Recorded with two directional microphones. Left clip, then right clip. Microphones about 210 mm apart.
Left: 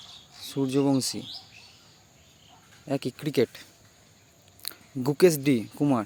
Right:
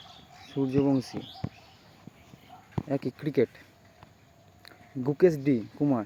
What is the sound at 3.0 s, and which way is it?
Speech, 15° left (ahead or behind).